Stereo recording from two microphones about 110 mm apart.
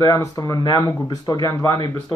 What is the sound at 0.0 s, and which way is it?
Speech, 30° left (ahead or behind).